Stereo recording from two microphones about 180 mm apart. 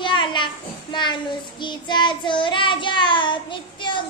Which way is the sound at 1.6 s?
25° left (ahead or behind).